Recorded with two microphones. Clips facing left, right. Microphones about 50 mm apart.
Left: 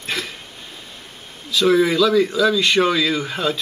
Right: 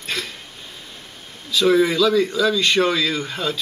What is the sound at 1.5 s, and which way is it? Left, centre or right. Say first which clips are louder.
Speech: left 1 dB; centre.